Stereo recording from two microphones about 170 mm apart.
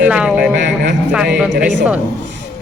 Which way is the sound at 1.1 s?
5° right (ahead or behind).